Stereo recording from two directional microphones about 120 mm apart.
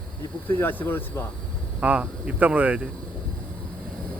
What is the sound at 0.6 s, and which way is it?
Speech, 15° left (ahead or behind).